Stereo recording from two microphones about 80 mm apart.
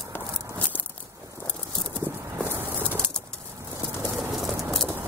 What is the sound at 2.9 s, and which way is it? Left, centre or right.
Bird flight, centre.